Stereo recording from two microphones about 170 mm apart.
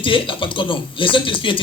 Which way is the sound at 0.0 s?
30° left (ahead or behind).